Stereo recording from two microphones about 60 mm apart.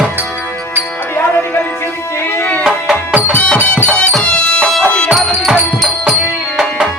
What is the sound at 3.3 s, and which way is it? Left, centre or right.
Music, centre.